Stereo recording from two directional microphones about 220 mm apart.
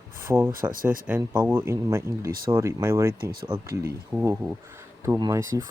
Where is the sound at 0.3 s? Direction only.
10° right (ahead or behind).